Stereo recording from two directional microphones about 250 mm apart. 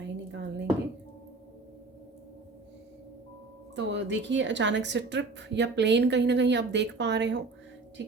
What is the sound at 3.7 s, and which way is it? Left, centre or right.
A woman's voice, right.